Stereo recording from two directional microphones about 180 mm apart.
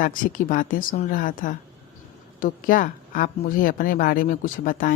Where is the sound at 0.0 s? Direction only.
50° left (ahead or behind).